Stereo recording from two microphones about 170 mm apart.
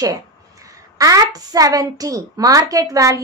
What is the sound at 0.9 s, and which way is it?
A child's voice, 20° right (ahead or behind).